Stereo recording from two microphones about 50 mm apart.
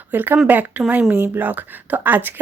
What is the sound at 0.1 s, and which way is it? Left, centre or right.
A woman's voice, right.